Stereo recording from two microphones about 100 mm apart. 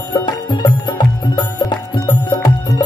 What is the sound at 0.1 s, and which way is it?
Music, 50° left (ahead or behind).